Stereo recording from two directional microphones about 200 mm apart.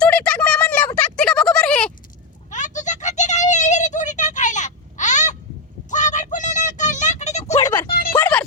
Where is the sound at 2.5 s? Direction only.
40° left (ahead or behind).